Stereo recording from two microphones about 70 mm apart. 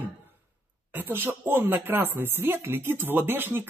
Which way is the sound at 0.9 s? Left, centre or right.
Right.